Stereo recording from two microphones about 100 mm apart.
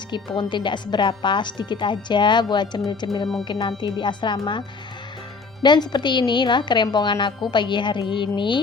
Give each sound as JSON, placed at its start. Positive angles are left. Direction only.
{"t": 0.1, "sound": "a woman's voice", "side_deg": 50}
{"t": 5.6, "sound": "a woman's voice", "side_deg": 45}